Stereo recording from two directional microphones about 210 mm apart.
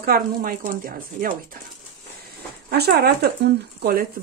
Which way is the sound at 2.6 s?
50° right (ahead or behind).